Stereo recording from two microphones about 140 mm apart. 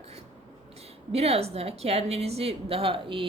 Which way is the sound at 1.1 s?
45° right (ahead or behind).